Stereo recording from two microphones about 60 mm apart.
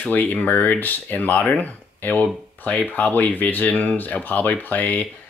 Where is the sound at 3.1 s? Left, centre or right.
Left.